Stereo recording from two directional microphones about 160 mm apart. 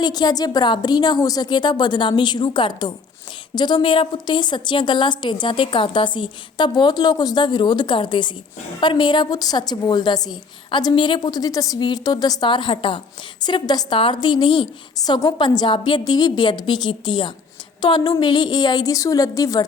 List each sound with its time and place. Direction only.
0.0 s a woman's voice: 25° left (ahead or behind)